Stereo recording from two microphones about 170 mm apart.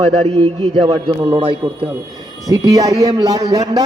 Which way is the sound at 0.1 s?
35° right (ahead or behind).